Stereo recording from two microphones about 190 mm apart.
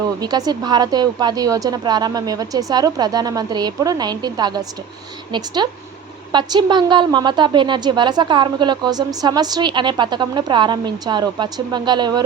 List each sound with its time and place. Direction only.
0.2 s a woman's voice: 20° right (ahead or behind)